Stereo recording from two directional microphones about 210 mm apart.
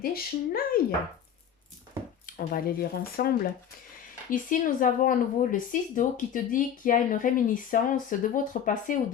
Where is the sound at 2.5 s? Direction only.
45° left (ahead or behind).